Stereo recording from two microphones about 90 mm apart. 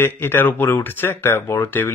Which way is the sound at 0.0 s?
25° left (ahead or behind).